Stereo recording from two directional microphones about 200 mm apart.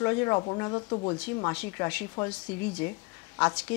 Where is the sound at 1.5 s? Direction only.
10° left (ahead or behind).